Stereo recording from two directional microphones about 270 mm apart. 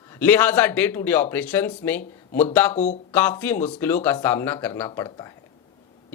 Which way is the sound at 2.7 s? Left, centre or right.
Left.